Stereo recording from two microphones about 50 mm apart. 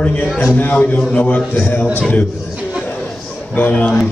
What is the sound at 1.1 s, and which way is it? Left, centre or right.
Speech, left.